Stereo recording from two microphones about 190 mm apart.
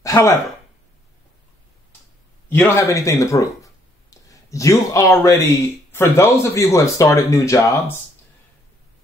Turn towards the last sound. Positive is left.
turn(degrees=15)  # may be behind; listen again after turning